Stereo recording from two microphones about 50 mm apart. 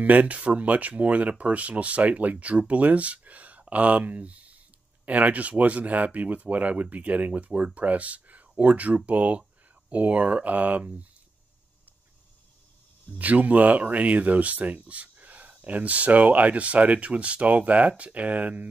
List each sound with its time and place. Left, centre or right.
0.0 s speech: right
13.2 s speech: right